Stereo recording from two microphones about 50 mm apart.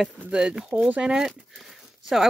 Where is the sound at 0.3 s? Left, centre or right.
Centre.